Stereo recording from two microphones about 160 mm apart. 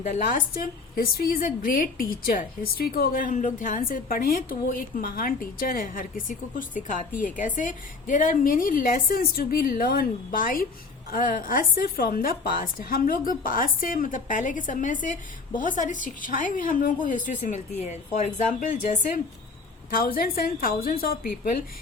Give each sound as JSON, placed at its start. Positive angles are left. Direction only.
{"t": 0.0, "sound": "a woman's voice", "side_deg": 60}
{"t": 19.9, "sound": "a woman's voice", "side_deg": 65}